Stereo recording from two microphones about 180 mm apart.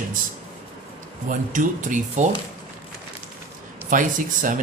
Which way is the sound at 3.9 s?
45° right (ahead or behind).